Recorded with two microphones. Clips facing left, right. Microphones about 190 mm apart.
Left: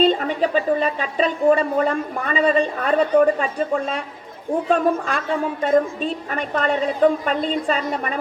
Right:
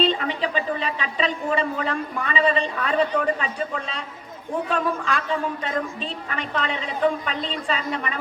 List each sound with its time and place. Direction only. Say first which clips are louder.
0.0 s speech: left 5 dB; 45° left (ahead or behind)